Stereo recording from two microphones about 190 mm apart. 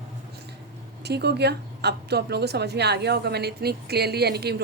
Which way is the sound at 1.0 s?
60° right (ahead or behind).